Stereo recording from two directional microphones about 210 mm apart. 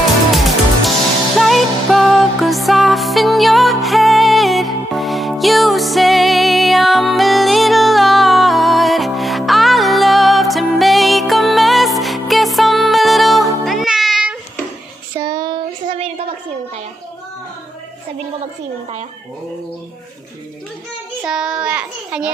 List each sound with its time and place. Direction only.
0.3 s music: centre (ahead or behind)
15.1 s a sound: 15° right (ahead or behind)
21.2 s child singing: 5° right (ahead or behind)